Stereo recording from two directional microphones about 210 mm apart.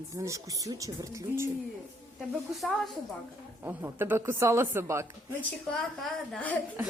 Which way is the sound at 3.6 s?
10° right (ahead or behind).